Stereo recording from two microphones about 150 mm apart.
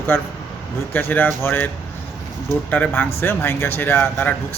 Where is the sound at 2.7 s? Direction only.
10° left (ahead or behind).